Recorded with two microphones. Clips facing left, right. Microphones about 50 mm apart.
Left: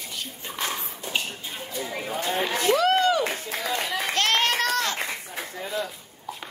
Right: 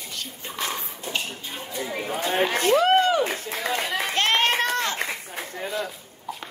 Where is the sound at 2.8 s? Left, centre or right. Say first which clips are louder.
Right 1 dB; right.